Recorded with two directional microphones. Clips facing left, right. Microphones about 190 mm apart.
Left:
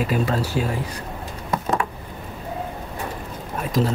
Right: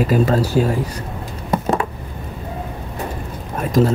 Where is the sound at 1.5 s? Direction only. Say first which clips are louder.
Right 4 dB; 25° right (ahead or behind).